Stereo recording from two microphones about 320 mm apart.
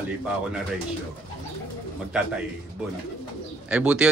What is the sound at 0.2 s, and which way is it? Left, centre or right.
Speech, centre.